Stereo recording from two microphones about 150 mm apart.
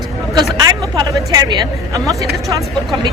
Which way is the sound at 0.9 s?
25° right (ahead or behind).